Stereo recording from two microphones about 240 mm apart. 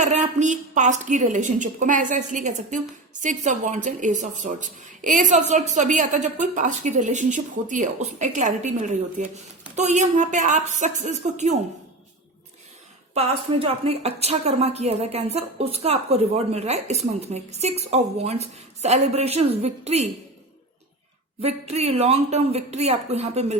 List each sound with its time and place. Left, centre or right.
0.0 s a woman's voice: right
13.1 s a woman's voice: right
21.4 s a woman's voice: right